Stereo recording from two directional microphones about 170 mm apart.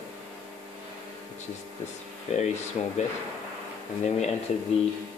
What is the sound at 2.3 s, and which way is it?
Speech, 40° left (ahead or behind).